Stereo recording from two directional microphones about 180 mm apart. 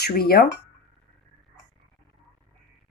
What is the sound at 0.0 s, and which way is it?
Speech, 55° left (ahead or behind).